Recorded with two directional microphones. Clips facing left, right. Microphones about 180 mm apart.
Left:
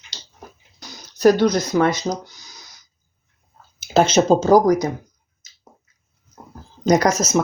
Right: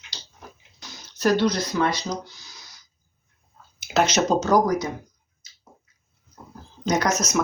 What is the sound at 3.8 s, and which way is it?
Speech, 30° left (ahead or behind).